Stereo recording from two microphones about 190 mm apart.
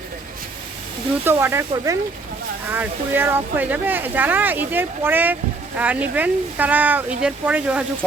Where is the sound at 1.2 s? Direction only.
15° right (ahead or behind).